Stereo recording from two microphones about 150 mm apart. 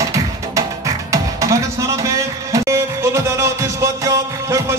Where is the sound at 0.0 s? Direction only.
20° right (ahead or behind).